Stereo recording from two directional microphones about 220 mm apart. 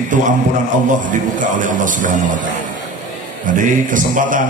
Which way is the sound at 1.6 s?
35° right (ahead or behind).